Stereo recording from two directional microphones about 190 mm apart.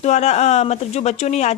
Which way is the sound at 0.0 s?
35° left (ahead or behind).